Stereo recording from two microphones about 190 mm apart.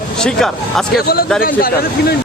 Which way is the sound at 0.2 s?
5° left (ahead or behind).